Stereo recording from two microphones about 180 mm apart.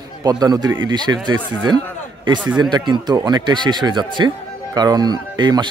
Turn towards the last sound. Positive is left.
turn(degrees=-25)  # may be behind; listen again after turning